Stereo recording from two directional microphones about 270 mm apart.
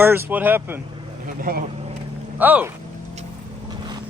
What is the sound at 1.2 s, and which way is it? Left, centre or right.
Speech, right.